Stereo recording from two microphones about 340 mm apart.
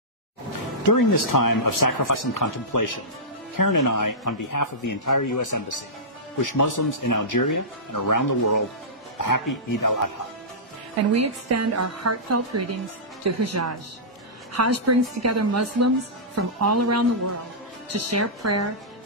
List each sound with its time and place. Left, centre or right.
0.8 s speech: left
11.1 s a woman's voice: right